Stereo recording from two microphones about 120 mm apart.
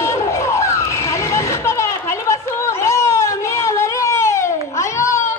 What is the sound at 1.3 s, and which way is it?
Chatter, 25° left (ahead or behind).